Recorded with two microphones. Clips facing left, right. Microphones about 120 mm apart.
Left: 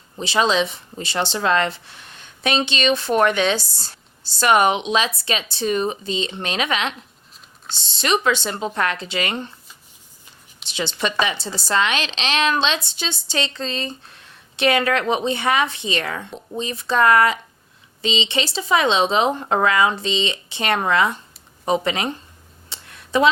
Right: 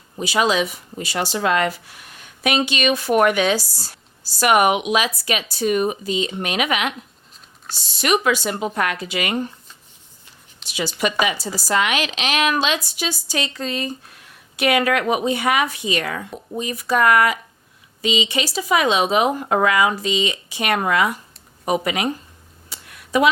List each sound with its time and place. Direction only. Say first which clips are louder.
0.2 s a woman's voice: even; 30° left (ahead or behind)
10.8 s a woman's voice: right 1 dB; 30° left (ahead or behind)
22.7 s a sound: right 1 dB; 25° left (ahead or behind)